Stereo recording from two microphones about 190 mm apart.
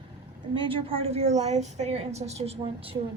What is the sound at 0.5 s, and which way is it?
A woman's voice, 25° right (ahead or behind).